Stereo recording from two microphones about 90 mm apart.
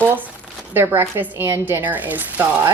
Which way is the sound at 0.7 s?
30° right (ahead or behind).